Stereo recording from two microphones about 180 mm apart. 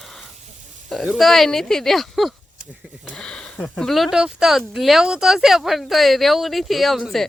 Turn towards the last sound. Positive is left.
turn(degrees=0)  # may be behind; listen again after turning